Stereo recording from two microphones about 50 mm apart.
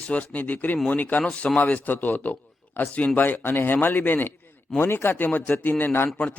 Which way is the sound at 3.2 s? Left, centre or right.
Left.